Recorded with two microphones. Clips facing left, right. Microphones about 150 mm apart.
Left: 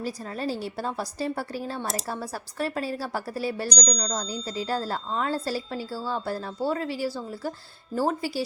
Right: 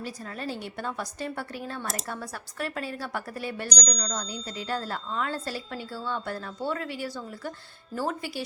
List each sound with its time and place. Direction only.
0.0 s speech: 35° left (ahead or behind)